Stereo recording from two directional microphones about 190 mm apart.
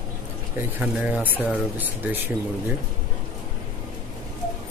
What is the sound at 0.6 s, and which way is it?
Speech, 10° right (ahead or behind).